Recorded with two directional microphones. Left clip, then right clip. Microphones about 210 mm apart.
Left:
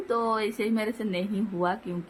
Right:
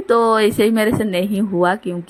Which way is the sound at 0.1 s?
30° right (ahead or behind).